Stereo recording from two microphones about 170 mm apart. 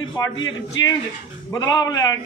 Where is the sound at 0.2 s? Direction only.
20° left (ahead or behind).